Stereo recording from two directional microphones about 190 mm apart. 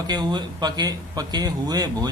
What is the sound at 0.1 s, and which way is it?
A man's voice, 25° right (ahead or behind).